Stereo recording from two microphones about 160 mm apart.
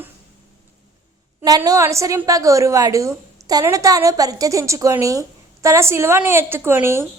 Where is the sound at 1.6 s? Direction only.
20° right (ahead or behind).